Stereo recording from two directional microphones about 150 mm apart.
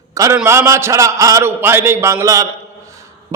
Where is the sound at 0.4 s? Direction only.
15° right (ahead or behind).